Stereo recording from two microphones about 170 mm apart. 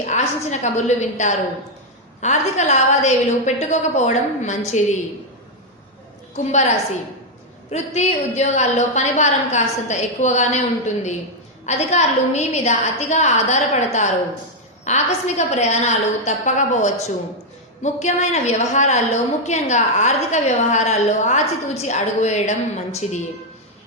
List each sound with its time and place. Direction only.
0.0 s a woman's voice: 45° left (ahead or behind)
6.3 s a woman's voice: 45° left (ahead or behind)
7.7 s a woman's voice: 40° left (ahead or behind)